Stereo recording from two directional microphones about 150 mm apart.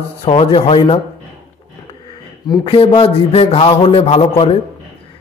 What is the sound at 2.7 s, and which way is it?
Speech, 40° left (ahead or behind).